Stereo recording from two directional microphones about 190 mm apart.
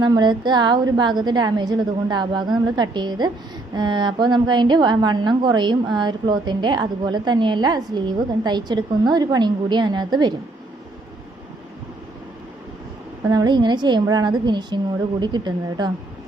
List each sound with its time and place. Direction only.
0.0 s a woman's voice: 25° right (ahead or behind)
13.3 s a woman's voice: 20° right (ahead or behind)